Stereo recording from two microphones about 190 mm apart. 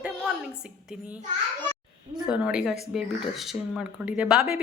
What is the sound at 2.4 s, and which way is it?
Speech, 5° right (ahead or behind).